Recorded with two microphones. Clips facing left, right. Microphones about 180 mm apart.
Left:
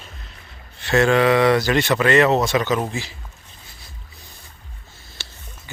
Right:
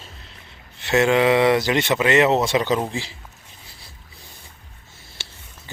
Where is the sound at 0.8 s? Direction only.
20° right (ahead or behind).